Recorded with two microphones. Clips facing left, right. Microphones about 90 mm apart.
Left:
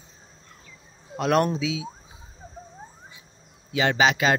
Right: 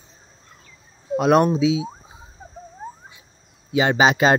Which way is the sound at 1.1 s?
15° right (ahead or behind).